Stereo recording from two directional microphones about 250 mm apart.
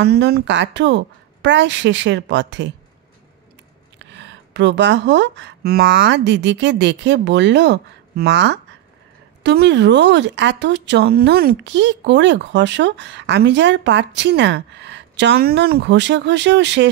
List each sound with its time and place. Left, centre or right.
0.0 s speech: right
4.0 s speech: right